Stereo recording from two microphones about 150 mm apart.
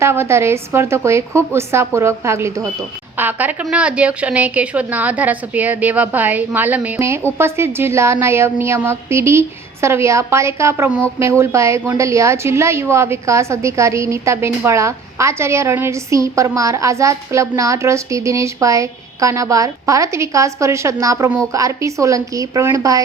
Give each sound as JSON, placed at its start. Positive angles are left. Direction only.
{"t": 0.0, "sound": "a woman's voice", "side_deg": -15}